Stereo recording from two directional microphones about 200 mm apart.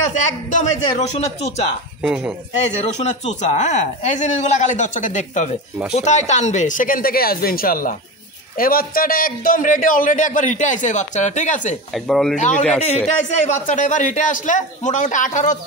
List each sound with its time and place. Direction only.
0.0 s a man's voice: 35° left (ahead or behind)
2.0 s speech: 5° right (ahead or behind)
2.6 s a man's voice: 35° left (ahead or behind)
11.9 s speech: centre (ahead or behind)
12.4 s a man's voice: 35° left (ahead or behind)